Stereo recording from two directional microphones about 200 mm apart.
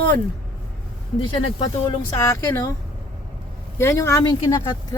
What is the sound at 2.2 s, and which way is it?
Speech, 15° left (ahead or behind).